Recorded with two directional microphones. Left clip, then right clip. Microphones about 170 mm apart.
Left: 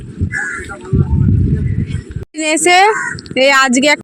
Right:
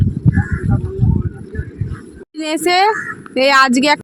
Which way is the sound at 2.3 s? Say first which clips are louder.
Left 5 dB; 10° left (ahead or behind).